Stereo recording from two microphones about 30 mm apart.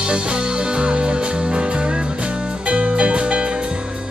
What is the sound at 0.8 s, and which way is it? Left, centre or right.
Music, right.